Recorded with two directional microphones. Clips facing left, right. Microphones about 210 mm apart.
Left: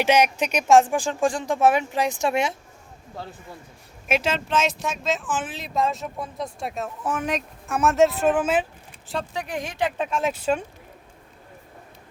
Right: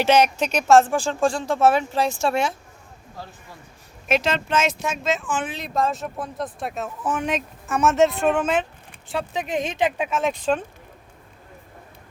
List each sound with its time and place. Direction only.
0.0 s speech: 15° left (ahead or behind)
4.1 s speech: 5° left (ahead or behind)
9.3 s speech: 20° right (ahead or behind)
10.1 s speech: centre (ahead or behind)